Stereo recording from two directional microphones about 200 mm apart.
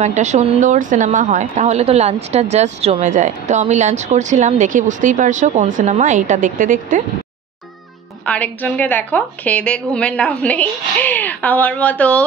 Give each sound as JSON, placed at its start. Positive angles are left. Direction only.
{"t": 0.0, "sound": "speech", "side_deg": -35}
{"t": 8.3, "sound": "a woman's voice", "side_deg": 5}